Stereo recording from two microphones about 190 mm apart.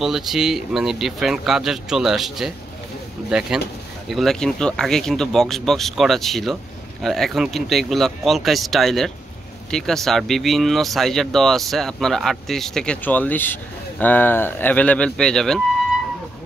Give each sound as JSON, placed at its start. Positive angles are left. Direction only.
{"t": 0.0, "sound": "speech", "side_deg": 0}